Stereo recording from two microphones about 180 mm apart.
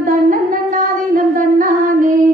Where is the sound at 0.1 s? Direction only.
45° right (ahead or behind).